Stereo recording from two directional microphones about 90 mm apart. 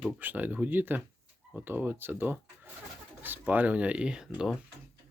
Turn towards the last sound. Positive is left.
turn(degrees=-10)  # may be behind; listen again after turning